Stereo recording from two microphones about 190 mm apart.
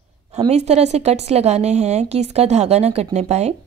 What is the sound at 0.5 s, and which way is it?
A woman's voice, 35° right (ahead or behind).